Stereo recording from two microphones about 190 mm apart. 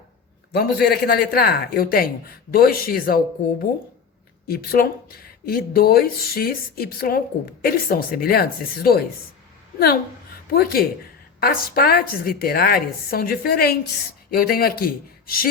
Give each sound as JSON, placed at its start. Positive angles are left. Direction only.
{"t": 0.5, "sound": "speech", "side_deg": 55}
{"t": 4.4, "sound": "speech", "side_deg": 50}